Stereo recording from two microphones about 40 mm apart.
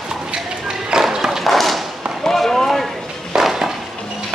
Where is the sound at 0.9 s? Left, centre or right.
Centre.